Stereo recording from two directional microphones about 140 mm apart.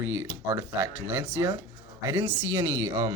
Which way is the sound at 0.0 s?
15° right (ahead or behind).